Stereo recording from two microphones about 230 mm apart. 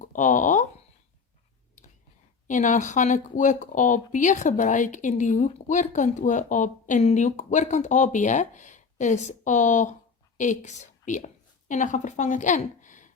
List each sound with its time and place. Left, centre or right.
0.0 s a sound: left
1.8 s whispering: left
2.5 s a woman's voice: left